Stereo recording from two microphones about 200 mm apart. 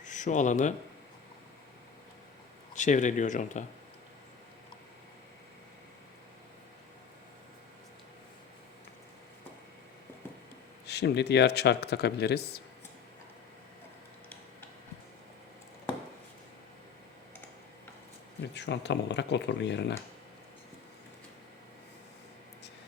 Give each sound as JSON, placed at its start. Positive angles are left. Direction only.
{"t": 0.0, "sound": "speech", "side_deg": 40}
{"t": 2.7, "sound": "speech", "side_deg": 35}
{"t": 10.8, "sound": "speech", "side_deg": 55}
{"t": 18.5, "sound": "speech", "side_deg": 60}